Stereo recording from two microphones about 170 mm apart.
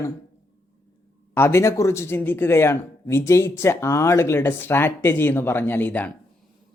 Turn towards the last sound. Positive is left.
turn(degrees=10)  # may be behind; listen again after turning